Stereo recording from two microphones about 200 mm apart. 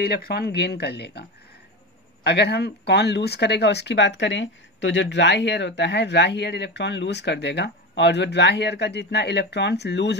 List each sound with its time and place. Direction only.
0.0 s speech: 55° left (ahead or behind)
2.2 s speech: 55° left (ahead or behind)